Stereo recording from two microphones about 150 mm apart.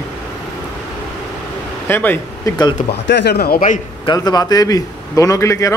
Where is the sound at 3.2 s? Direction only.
90° left; by 3.8 s 75° left (ahead or behind).